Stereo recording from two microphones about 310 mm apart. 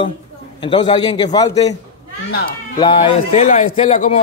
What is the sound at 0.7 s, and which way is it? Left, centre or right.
A man's voice, centre.